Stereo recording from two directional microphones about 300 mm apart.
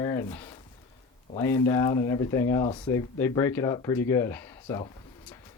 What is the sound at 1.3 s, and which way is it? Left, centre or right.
A man's voice, centre.